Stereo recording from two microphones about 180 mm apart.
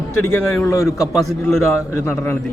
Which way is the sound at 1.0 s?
Centre (ahead or behind).